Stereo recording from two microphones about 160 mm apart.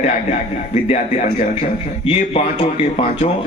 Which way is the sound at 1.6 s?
35° left (ahead or behind).